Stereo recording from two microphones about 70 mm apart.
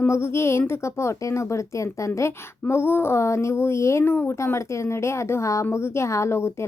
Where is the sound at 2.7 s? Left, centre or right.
Left.